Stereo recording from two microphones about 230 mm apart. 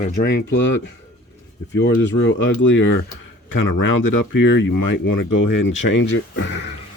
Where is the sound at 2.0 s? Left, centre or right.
Left.